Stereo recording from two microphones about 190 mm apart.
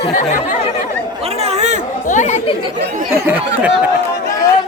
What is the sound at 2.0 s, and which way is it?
Chatter, 40° left (ahead or behind).